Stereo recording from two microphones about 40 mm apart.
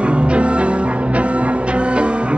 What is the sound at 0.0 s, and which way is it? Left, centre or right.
Music, right.